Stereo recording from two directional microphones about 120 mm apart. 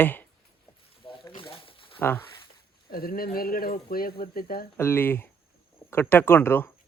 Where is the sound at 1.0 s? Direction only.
45° left (ahead or behind).